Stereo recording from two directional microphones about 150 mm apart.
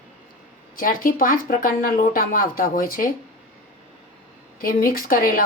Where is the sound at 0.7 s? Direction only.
65° left (ahead or behind).